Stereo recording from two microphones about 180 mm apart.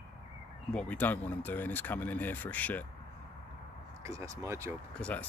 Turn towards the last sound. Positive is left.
turn(degrees=5)  # may be behind; listen again after turning